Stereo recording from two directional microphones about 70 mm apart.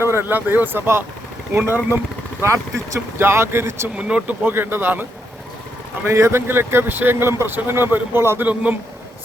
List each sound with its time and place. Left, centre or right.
0.0 s speech: right
2.4 s speech: right
3.9 s speech: centre
4.4 s speech: right
6.1 s speech: right